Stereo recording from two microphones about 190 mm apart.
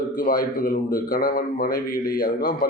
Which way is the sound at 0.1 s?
45° left (ahead or behind).